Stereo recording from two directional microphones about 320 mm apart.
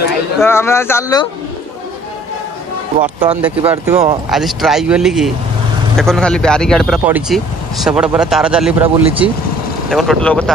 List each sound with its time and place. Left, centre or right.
0.4 s speech: centre
3.0 s speech: centre
3.6 s speech: centre
8.8 s speech: centre
9.8 s speech: centre